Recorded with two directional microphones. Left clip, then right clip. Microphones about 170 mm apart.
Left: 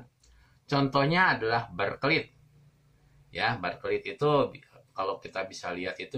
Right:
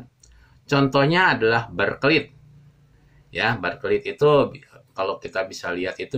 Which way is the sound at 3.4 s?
20° right (ahead or behind).